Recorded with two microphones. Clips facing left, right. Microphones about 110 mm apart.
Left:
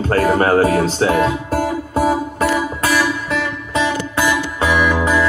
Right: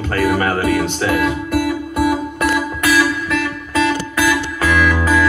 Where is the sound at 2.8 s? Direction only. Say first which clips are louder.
Right 2 dB; 30° left (ahead or behind).